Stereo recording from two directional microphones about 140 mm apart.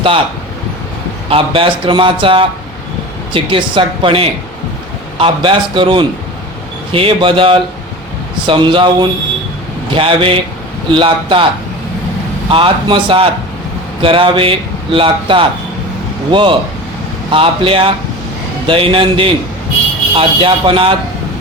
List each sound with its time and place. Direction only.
1.3 s speech: 40° right (ahead or behind)
12.5 s speech: 40° right (ahead or behind)